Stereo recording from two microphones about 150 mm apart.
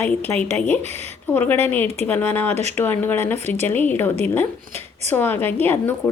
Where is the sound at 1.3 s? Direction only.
10° left (ahead or behind).